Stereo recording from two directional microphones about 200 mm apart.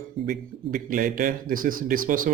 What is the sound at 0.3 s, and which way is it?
Speech, 45° right (ahead or behind).